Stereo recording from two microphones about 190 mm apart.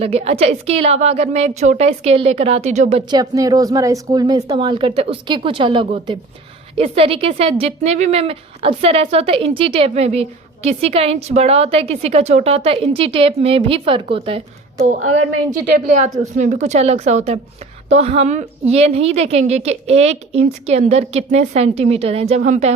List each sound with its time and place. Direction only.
0.0 s speech: 35° right (ahead or behind)
3.1 s a woman's voice: 20° right (ahead or behind)
16.4 s speech: 40° right (ahead or behind)